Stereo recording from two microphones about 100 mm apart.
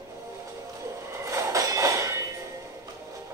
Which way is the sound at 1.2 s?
30° right (ahead or behind).